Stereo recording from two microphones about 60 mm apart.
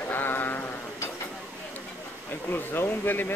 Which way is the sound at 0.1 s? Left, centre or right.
Left.